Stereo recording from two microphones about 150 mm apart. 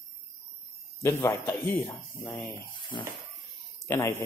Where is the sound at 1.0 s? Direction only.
20° left (ahead or behind).